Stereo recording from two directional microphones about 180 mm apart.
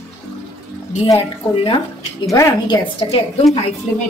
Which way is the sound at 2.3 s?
25° left (ahead or behind).